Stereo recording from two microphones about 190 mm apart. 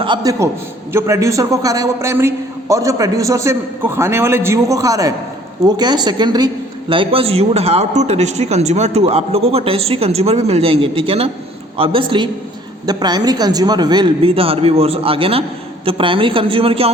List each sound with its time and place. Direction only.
0.0 s a man's voice: 20° right (ahead or behind)